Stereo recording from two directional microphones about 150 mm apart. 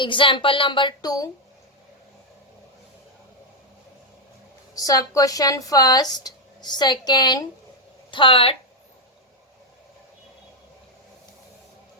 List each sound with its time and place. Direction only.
0.0 s a woman's voice: 35° left (ahead or behind)
4.7 s a woman's voice: 25° left (ahead or behind)